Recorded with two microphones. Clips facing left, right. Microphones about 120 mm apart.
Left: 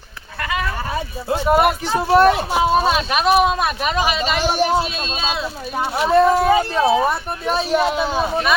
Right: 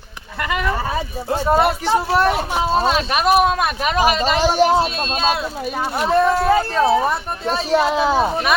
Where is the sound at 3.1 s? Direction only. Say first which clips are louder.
Even; 5° right (ahead or behind).